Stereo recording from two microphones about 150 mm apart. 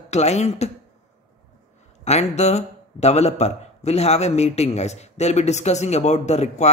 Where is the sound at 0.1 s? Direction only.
45° left (ahead or behind).